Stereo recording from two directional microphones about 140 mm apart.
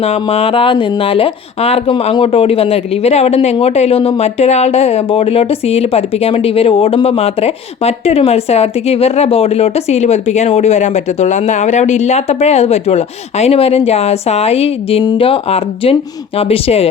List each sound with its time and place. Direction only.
0.0 s speech: 50° left (ahead or behind)